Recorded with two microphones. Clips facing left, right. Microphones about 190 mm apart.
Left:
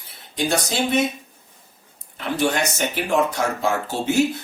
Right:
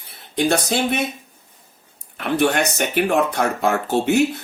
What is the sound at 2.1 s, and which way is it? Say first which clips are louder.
Speech: right 3 dB; 60° right (ahead or behind).